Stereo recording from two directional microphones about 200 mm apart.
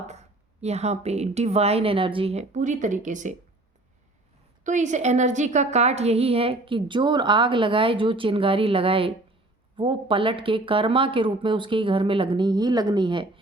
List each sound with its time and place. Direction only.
0.1 s a woman's voice: 35° right (ahead or behind)
4.6 s a woman's voice: 35° right (ahead or behind)